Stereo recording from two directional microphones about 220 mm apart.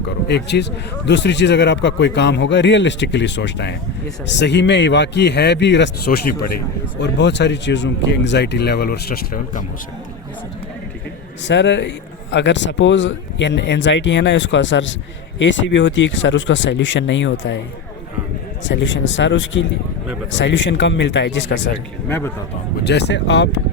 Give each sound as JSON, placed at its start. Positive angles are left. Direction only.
{"t": 0.3, "sound": "a man's voice", "side_deg": 50}
{"t": 11.4, "sound": "speech", "side_deg": 55}
{"t": 18.6, "sound": "speech", "side_deg": 55}
{"t": 22.8, "sound": "a man's voice", "side_deg": 50}